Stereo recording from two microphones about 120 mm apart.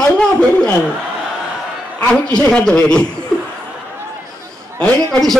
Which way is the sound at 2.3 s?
5° left (ahead or behind).